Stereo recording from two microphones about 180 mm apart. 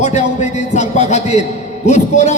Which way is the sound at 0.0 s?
40° left (ahead or behind).